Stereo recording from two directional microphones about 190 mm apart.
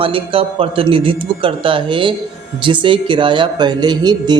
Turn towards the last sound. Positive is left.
turn(degrees=-20)  # may be behind; listen again after turning